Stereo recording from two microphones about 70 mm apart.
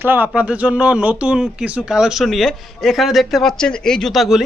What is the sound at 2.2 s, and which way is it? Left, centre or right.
A woman's voice, centre.